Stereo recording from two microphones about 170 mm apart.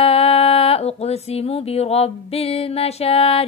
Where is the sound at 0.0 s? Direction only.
35° left (ahead or behind).